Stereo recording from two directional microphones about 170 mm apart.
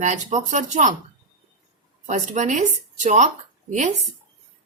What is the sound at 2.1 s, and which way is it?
Speech, 45° right (ahead or behind).